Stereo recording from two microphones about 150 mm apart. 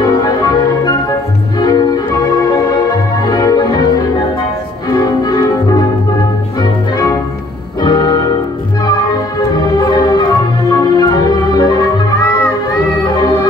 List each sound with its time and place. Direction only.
0.0 s music: 25° left (ahead or behind)
9.8 s music: 25° left (ahead or behind)
13.1 s music: 25° left (ahead or behind)